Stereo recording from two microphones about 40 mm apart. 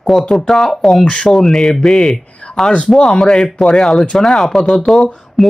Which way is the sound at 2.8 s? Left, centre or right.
Centre.